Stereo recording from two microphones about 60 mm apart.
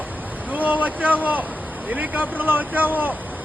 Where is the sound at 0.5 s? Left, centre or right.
Right.